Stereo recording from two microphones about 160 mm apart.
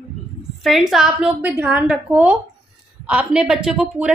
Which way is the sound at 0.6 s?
Centre (ahead or behind).